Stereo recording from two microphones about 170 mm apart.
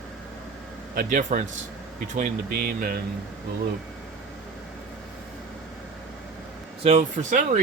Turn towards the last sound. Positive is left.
turn(degrees=-45)  # may be behind; listen again after turning